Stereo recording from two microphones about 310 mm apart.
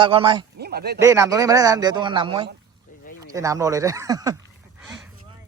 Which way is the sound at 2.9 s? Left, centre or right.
Left.